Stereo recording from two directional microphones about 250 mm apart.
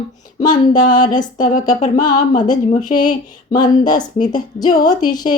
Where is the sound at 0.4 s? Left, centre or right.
Centre.